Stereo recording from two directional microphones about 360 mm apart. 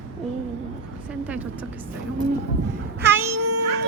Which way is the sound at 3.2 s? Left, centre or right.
Right.